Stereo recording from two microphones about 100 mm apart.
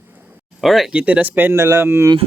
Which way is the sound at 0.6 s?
Centre (ahead or behind).